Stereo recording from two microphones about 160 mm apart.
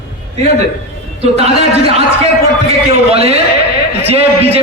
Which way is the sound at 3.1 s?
40° right (ahead or behind).